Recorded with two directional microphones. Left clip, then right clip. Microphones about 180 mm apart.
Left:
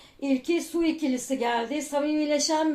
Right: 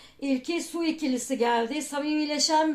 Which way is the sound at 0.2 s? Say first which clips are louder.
Left 3 dB; 30° right (ahead or behind).